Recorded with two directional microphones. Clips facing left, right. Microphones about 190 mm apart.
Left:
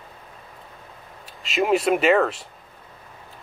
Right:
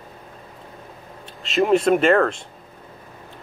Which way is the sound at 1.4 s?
Centre (ahead or behind).